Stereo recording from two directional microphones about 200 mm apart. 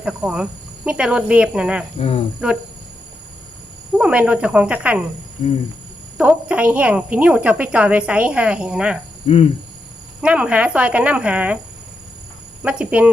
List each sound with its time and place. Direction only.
0.0 s a woman's voice: 5° right (ahead or behind)
2.0 s cricket: 30° left (ahead or behind)
3.9 s a woman's voice: 5° right (ahead or behind)
6.1 s a woman's voice: 5° right (ahead or behind)
9.2 s cricket: 30° left (ahead or behind)
10.2 s a woman's voice: 5° right (ahead or behind)
12.6 s speech: 5° right (ahead or behind)